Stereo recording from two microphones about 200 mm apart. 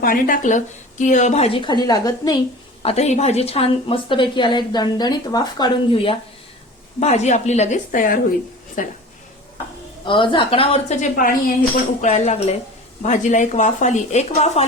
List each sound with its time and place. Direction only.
0.0 s a woman's voice: 45° left (ahead or behind); by 2.4 s 20° left (ahead or behind)
2.8 s a woman's voice: 30° left (ahead or behind)
10.1 s a woman's voice: 25° left (ahead or behind)